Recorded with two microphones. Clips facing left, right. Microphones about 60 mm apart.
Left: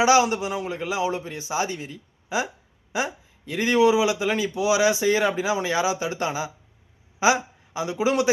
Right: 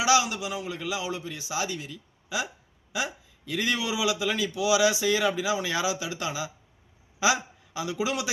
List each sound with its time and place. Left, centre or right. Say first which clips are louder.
0.0 s a man's voice: left 5 dB; left